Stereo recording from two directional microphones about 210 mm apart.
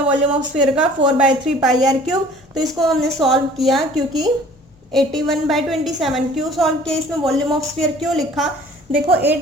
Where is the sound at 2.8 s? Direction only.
Centre (ahead or behind).